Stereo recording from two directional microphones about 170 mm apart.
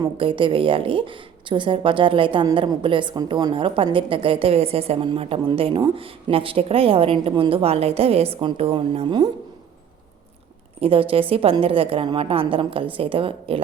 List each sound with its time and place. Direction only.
0.0 s a woman's voice: 30° right (ahead or behind)
10.8 s a woman's voice: 35° right (ahead or behind)